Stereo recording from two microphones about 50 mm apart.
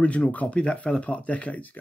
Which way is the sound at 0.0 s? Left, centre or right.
Left.